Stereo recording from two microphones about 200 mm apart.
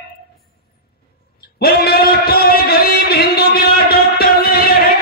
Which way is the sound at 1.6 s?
50° left (ahead or behind).